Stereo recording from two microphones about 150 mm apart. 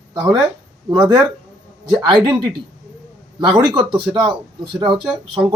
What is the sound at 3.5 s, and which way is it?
Speech, 30° right (ahead or behind).